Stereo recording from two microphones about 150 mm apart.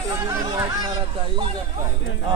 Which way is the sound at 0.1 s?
20° right (ahead or behind).